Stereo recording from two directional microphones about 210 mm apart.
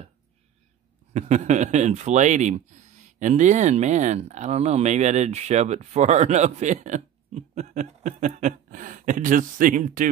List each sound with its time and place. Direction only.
1.1 s speech: 35° right (ahead or behind)